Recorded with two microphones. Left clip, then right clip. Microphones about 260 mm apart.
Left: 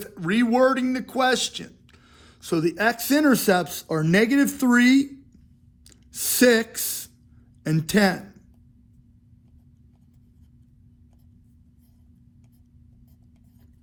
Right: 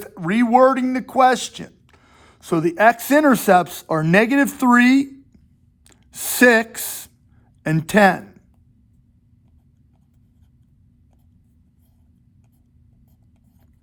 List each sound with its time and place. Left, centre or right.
0.2 s a man's voice: right